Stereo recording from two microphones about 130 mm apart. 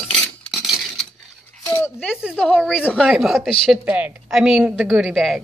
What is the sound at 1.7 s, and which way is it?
Speech, 15° left (ahead or behind).